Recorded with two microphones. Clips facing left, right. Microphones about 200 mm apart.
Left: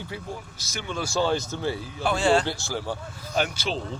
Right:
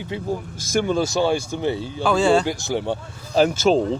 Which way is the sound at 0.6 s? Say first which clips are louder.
Right 15 dB; 50° right (ahead or behind).